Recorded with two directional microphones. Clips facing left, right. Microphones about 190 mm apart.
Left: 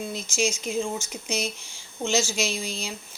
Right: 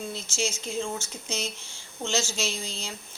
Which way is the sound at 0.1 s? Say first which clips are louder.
Left 4 dB; 15° left (ahead or behind).